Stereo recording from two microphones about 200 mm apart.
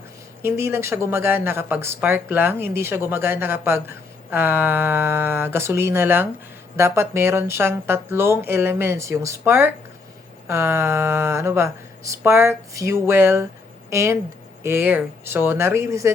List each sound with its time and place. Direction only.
0.4 s speech: 10° right (ahead or behind)